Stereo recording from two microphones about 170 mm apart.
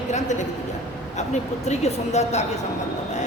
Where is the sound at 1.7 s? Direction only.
40° left (ahead or behind).